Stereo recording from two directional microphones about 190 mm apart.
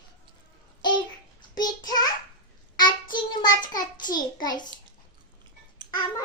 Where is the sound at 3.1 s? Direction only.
25° left (ahead or behind).